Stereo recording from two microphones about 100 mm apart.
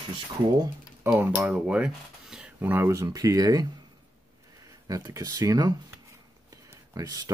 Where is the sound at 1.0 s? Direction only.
15° right (ahead or behind); by 3.6 s 40° right (ahead or behind).